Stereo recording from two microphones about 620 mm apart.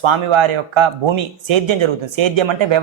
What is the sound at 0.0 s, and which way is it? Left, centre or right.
Speech, right.